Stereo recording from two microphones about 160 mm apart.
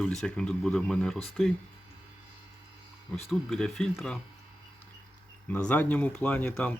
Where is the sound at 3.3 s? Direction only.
5° left (ahead or behind).